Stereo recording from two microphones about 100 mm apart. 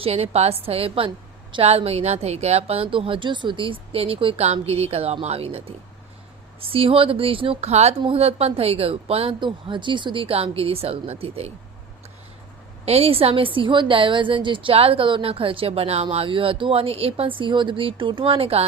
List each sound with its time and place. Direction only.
0.0 s a woman's voice: 90° right; by 1.1 s 70° right (ahead or behind)
1.6 s a woman's voice: 90° right; by 9.3 s 75° right (ahead or behind)
9.4 s speech: 55° right (ahead or behind); by 11.5 s 90° right
12.8 s a woman's voice: 85° right; by 18.6 s 70° right (ahead or behind)